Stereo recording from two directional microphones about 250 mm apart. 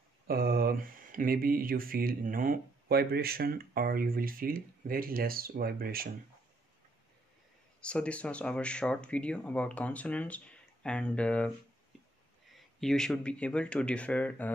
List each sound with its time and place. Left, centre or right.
0.3 s speech: right
7.8 s speech: centre
12.5 s speech: centre